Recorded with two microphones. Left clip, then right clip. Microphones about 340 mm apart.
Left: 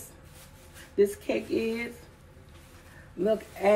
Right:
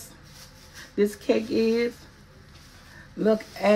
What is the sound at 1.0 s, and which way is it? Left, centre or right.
Speech, right.